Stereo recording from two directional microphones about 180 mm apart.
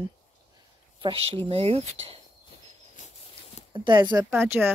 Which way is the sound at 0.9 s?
30° right (ahead or behind).